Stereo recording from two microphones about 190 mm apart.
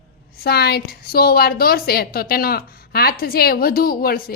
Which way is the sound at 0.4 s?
55° left (ahead or behind).